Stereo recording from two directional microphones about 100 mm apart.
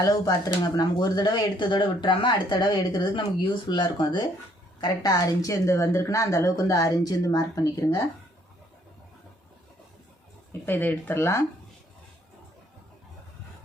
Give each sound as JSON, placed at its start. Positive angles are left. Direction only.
{"t": 0.1, "sound": "a woman's voice", "side_deg": 40}
{"t": 10.5, "sound": "speech", "side_deg": 20}